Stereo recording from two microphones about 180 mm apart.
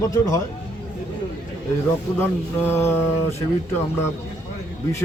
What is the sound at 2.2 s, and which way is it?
Speech, 10° left (ahead or behind).